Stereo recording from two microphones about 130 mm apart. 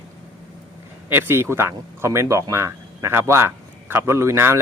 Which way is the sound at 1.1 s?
15° right (ahead or behind).